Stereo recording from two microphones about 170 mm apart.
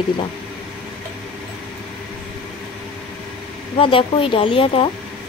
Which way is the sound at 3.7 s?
30° left (ahead or behind).